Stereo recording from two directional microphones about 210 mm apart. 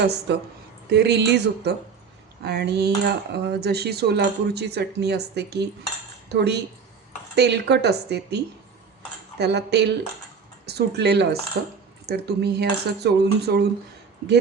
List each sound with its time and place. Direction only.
0.0 s speech: 50° right (ahead or behind)